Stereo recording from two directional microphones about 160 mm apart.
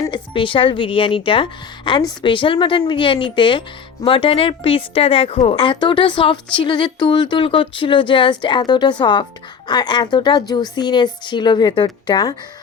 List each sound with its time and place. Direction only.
0.0 s speech: 30° left (ahead or behind)